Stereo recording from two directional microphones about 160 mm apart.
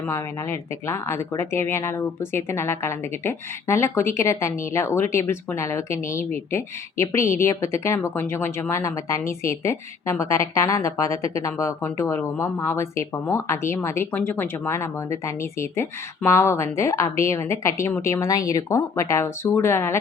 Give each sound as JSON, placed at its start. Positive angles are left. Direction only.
{"t": 0.1, "sound": "speech", "side_deg": 15}